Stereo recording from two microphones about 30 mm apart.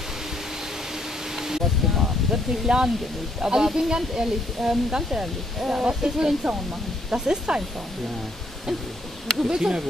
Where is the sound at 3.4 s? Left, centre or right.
Right.